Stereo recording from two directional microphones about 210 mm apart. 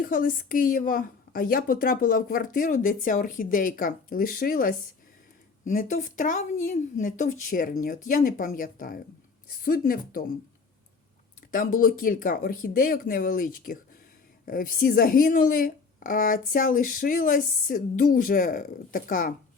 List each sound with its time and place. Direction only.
0.0 s a woman's voice: 40° left (ahead or behind)
11.5 s a woman's voice: 40° left (ahead or behind)